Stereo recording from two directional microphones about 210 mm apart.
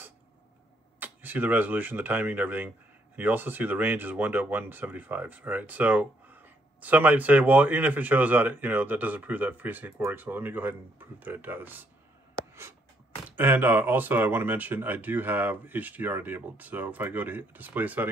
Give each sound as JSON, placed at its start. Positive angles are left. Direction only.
{"t": 0.9, "sound": "speech", "side_deg": -10}
{"t": 13.4, "sound": "speech", "side_deg": -10}